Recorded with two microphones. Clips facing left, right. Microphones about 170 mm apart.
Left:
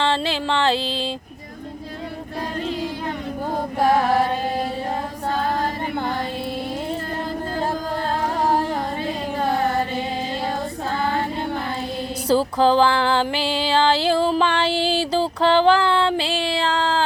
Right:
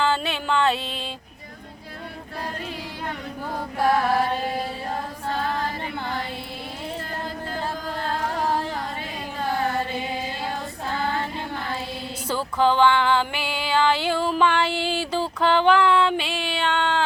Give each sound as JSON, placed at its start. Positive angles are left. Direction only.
{"t": 0.0, "sound": "music", "side_deg": 30}
{"t": 12.3, "sound": "music", "side_deg": 35}